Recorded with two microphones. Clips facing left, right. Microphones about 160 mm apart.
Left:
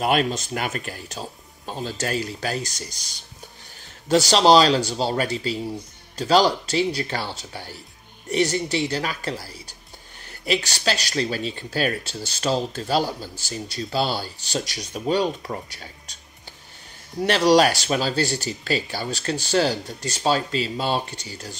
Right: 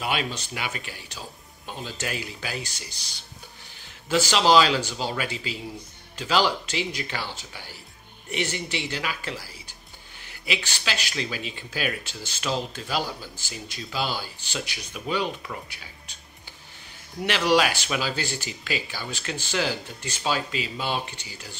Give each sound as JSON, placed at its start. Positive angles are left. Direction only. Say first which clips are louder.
{"t": 0.0, "sound": "speech", "louder": "left 7 dB", "side_deg": 45}
{"t": 4.1, "sound": "speech", "louder": "left 4 dB", "side_deg": 40}
{"t": 17.2, "sound": "speech", "louder": "left 5 dB", "side_deg": 40}